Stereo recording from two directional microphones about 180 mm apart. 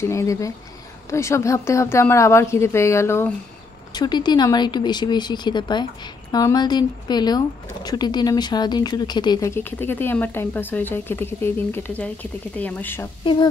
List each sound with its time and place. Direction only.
0.0 s speech: 15° left (ahead or behind)
13.2 s speech: 25° left (ahead or behind)